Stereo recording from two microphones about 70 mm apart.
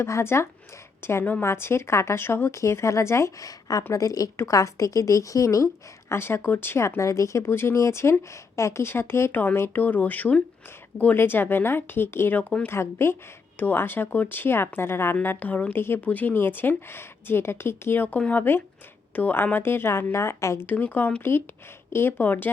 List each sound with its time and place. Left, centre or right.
0.0 s a woman's voice: left
6.1 s a woman's voice: left
9.3 s a woman's voice: left
12.3 s a woman's voice: left
20.7 s speech: left